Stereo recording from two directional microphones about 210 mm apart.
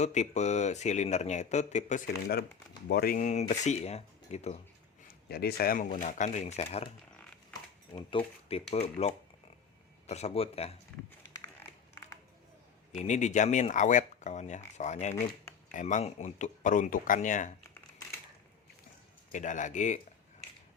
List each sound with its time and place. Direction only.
0.0 s speech: 35° left (ahead or behind)
5.3 s speech: 50° left (ahead or behind); by 6.9 s 30° left (ahead or behind)
7.9 s speech: 25° left (ahead or behind)
12.9 s speech: 35° left (ahead or behind)
19.3 s speech: 35° left (ahead or behind)